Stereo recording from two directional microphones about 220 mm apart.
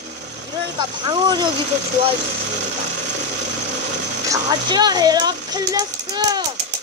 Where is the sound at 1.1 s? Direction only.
20° right (ahead or behind).